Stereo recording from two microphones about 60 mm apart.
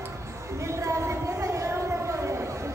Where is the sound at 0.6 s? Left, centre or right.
Right.